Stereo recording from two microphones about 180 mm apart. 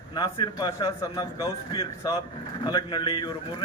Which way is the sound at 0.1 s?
25° left (ahead or behind).